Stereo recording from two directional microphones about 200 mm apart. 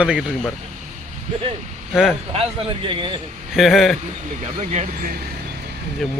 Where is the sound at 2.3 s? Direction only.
25° right (ahead or behind).